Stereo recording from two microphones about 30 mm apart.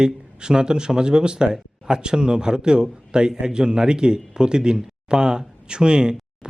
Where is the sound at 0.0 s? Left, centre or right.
Right.